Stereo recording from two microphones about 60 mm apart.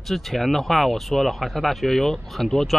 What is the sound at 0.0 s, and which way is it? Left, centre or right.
Speech, centre.